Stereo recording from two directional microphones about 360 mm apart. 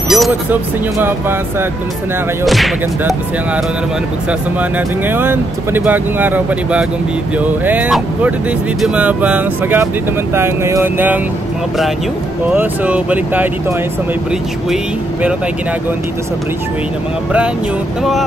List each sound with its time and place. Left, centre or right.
0.1 s speech: centre
2.4 s speech: centre
4.3 s speech: centre
12.4 s speech: centre